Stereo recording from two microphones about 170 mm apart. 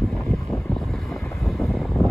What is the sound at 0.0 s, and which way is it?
Boat, centre (ahead or behind).